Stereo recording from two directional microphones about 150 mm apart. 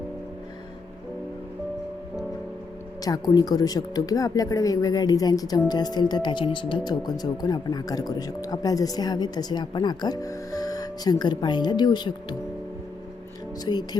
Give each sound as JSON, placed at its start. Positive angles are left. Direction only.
{"t": 3.0, "sound": "speech", "side_deg": 25}
{"t": 13.7, "sound": "speech", "side_deg": 30}